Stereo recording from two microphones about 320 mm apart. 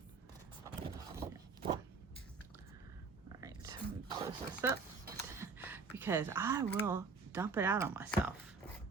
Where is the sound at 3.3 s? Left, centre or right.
Centre.